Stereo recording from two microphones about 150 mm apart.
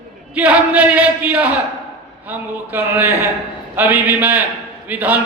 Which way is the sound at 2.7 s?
15° right (ahead or behind).